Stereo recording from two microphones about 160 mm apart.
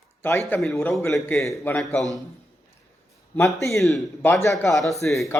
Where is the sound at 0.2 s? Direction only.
15° left (ahead or behind).